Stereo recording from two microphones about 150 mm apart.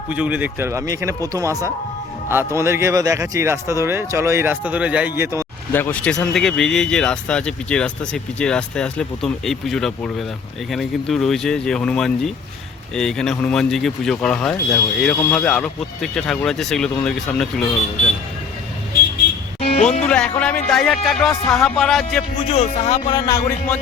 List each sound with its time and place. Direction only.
0.1 s speech: 10° right (ahead or behind)
5.7 s speech: 10° left (ahead or behind)
19.6 s music: 55° left (ahead or behind)
20.1 s speech: 5° left (ahead or behind)
22.4 s music: 45° left (ahead or behind)
23.1 s speech: 25° left (ahead or behind)